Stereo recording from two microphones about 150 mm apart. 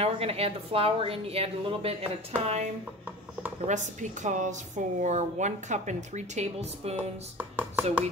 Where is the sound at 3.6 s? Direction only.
55° right (ahead or behind).